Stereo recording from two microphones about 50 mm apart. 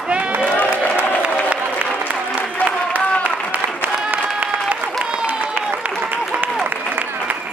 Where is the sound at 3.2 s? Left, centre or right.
Right.